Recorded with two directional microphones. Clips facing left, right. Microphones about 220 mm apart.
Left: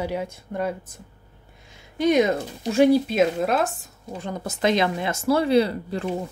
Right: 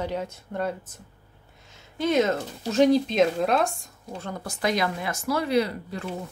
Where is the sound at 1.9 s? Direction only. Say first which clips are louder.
Left 3 dB; 15° left (ahead or behind).